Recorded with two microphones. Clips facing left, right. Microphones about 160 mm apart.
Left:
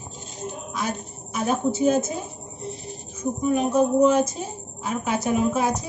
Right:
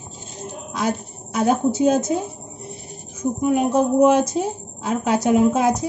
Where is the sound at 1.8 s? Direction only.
80° right.